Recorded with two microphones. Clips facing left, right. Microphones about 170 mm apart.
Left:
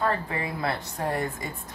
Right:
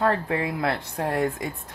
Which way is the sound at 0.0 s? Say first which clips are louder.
Right 4 dB; 70° right (ahead or behind).